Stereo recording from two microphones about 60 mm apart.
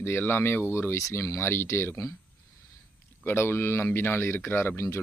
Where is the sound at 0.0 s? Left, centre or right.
Left.